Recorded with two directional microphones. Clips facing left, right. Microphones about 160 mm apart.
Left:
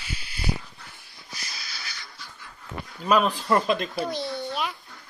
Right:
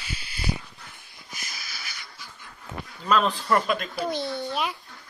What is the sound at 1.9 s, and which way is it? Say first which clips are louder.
Dog: left 1 dB; 15° right (ahead or behind).